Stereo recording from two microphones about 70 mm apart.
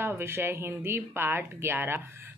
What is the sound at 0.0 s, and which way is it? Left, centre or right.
A woman's voice, right.